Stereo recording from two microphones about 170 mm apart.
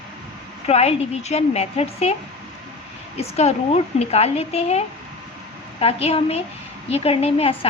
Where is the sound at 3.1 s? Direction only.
40° left (ahead or behind).